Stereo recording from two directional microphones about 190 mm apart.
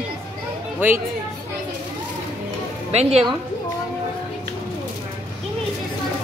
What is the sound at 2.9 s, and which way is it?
Speech, 35° right (ahead or behind).